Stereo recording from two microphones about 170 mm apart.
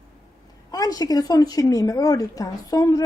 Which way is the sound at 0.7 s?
20° left (ahead or behind).